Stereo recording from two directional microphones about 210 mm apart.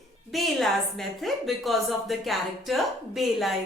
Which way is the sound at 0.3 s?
Centre (ahead or behind).